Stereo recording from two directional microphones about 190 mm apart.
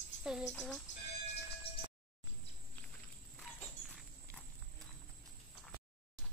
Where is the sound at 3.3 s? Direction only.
Centre (ahead or behind).